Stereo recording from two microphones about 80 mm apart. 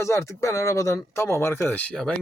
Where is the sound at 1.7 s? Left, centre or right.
Centre.